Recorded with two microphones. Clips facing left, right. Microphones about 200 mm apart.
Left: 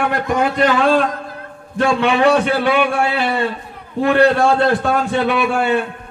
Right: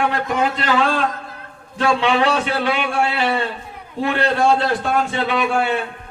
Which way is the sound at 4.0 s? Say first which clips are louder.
Left 5 dB; 55° left (ahead or behind).